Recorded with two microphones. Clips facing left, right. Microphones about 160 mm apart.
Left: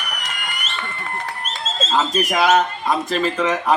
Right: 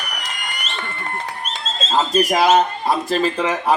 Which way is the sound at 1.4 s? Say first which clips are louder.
Left 1 dB; 5° left (ahead or behind).